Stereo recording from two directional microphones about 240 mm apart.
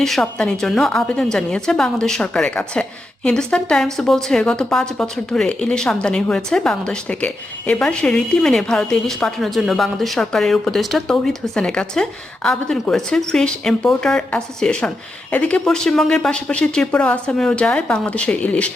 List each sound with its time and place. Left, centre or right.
0.0 s speech: centre